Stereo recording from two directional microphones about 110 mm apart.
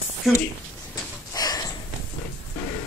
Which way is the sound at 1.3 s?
35° left (ahead or behind).